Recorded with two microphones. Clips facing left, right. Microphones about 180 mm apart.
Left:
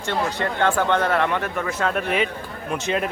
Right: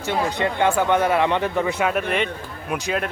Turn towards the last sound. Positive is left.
turn(degrees=0)  # may be behind; listen again after turning